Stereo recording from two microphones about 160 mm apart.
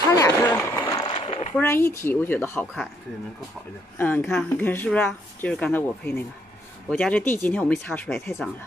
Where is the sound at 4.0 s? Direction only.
10° left (ahead or behind).